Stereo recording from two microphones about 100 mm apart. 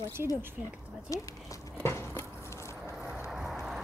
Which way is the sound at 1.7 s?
25° left (ahead or behind).